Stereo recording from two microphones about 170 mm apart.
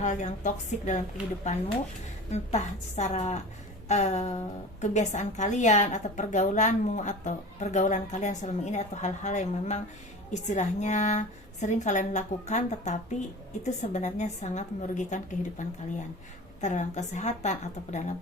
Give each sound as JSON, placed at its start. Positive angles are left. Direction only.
{"t": 0.0, "sound": "a woman's voice", "side_deg": 45}